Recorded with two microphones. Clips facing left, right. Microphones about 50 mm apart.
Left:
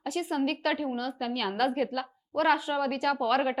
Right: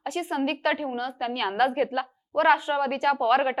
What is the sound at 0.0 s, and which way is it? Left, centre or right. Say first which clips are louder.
A woman's voice: right 2 dB; centre.